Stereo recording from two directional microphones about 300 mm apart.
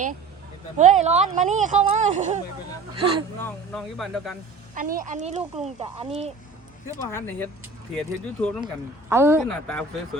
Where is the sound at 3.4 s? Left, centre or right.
Centre.